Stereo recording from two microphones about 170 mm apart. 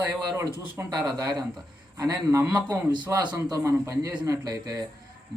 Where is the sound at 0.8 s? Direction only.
15° right (ahead or behind).